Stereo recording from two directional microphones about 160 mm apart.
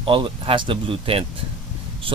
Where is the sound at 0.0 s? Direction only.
35° right (ahead or behind).